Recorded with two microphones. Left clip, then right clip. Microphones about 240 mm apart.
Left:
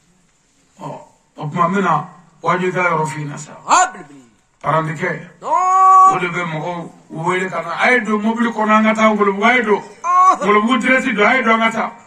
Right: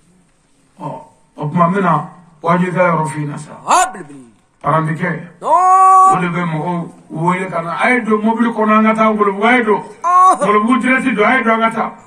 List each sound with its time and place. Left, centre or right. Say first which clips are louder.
1.6 s a man's voice: right 2 dB; left
3.6 s a sound: right 1 dB; right
4.6 s a man's voice: right 2 dB; left
5.4 s female singing: right 3 dB; right
6.3 s a man's voice: right 2 dB; left
10.0 s a sound: right 3 dB; right
10.5 s a man's voice: right 1 dB; left